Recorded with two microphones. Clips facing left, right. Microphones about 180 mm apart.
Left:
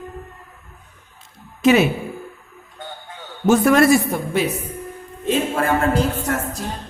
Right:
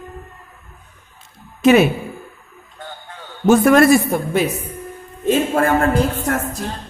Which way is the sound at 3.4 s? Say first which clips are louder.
Right 3 dB; 50° right (ahead or behind).